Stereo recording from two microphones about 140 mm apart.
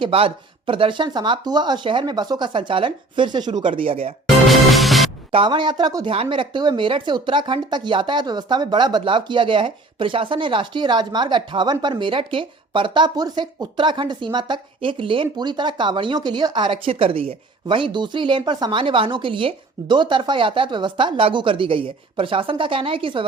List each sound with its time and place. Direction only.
0.0 s speech: 40° right (ahead or behind)
4.4 s music: centre (ahead or behind)
5.3 s speech: 35° right (ahead or behind)